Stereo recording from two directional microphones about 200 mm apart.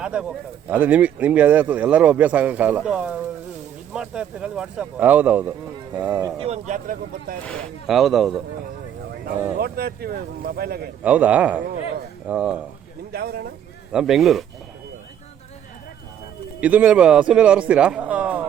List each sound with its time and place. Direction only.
0.0 s speech: 5° right (ahead or behind)
6.1 s speech: 20° right (ahead or behind); by 7.3 s 45° right (ahead or behind)
7.4 s a man's voice: centre (ahead or behind)
9.6 s speech: 50° right (ahead or behind)
11.0 s a man's voice: 5° right (ahead or behind)
13.1 s speech: 50° right (ahead or behind)
13.9 s a man's voice: centre (ahead or behind)
16.6 s a man's voice: 5° right (ahead or behind)